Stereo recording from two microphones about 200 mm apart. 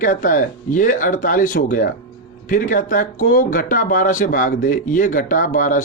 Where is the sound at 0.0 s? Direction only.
40° left (ahead or behind).